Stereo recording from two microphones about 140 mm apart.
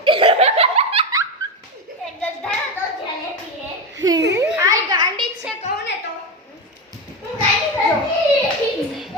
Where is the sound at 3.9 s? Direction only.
25° right (ahead or behind).